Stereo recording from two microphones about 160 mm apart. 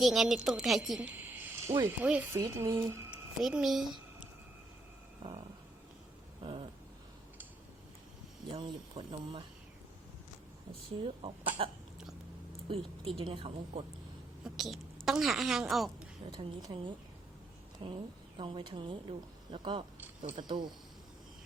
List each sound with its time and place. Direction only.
0.0 s a woman's voice: centre (ahead or behind); by 3.2 s 15° right (ahead or behind)
3.4 s a woman's voice: centre (ahead or behind)
6.4 s a sound: 35° right (ahead or behind)
8.4 s speech: 30° right (ahead or behind)
11.6 s speech: 35° right (ahead or behind)
14.4 s a woman's voice: centre (ahead or behind)
16.3 s a woman's voice: 30° right (ahead or behind)